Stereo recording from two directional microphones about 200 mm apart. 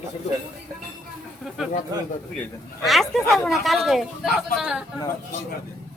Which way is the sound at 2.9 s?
Centre (ahead or behind).